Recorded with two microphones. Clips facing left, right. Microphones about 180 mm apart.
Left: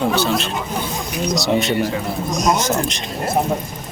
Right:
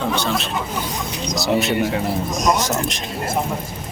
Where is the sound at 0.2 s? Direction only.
Centre (ahead or behind).